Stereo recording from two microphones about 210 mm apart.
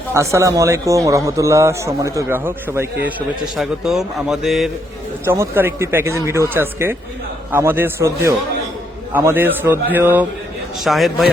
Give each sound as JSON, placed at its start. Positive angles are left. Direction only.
{"t": 0.1, "sound": "a man's voice", "side_deg": -15}
{"t": 5.2, "sound": "a man's voice", "side_deg": -10}